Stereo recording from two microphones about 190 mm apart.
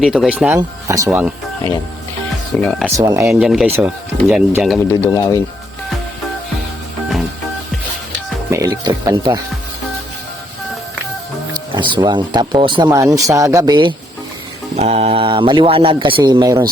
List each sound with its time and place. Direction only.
0.0 s speech: 5° right (ahead or behind)
2.6 s speech: 5° left (ahead or behind)
2.8 s speech: 15° right (ahead or behind)
3.2 s speech: 5° right (ahead or behind)
4.8 s speech: 15° left (ahead or behind)
8.4 s speech: 15° right (ahead or behind)
11.7 s speech: 25° right (ahead or behind)